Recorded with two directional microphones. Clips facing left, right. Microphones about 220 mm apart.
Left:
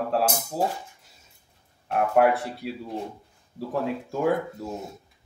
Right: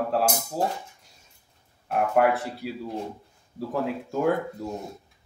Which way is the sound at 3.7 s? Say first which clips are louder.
Even; centre (ahead or behind).